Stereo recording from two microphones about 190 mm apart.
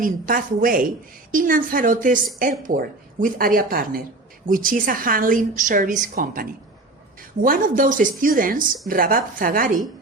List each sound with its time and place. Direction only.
0.0 s a woman's voice: 45° right (ahead or behind)